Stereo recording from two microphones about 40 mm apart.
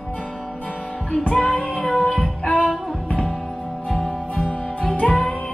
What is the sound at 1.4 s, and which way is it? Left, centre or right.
Child singing, centre.